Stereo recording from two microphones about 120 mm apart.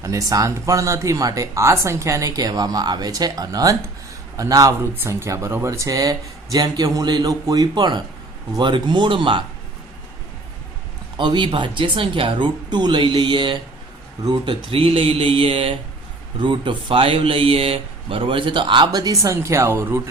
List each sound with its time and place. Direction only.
0.0 s speech: 30° right (ahead or behind); by 9.4 s 45° right (ahead or behind)
11.2 s speech: 40° right (ahead or behind); by 20.0 s 20° right (ahead or behind)